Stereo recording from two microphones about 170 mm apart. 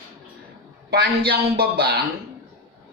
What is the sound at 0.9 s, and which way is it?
Speech, 65° right (ahead or behind).